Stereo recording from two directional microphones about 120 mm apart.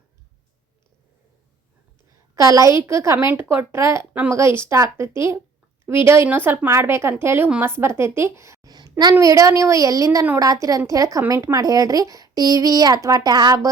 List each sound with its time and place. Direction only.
2.3 s a woman's voice: 30° right (ahead or behind)